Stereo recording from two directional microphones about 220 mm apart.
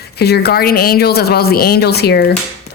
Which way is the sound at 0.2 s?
45° left (ahead or behind).